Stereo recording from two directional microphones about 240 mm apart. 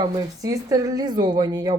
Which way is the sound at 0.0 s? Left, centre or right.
Centre.